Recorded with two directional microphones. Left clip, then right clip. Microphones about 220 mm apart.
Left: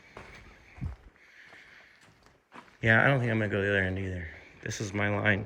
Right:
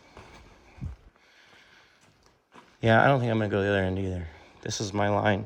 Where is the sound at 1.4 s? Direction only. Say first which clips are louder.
Left 4 dB; 25° right (ahead or behind).